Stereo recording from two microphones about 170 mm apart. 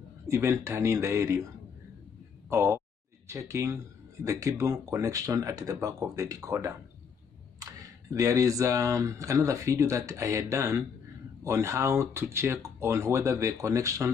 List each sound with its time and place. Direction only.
0.3 s speech: 15° right (ahead or behind)
2.5 s speech: 15° right (ahead or behind)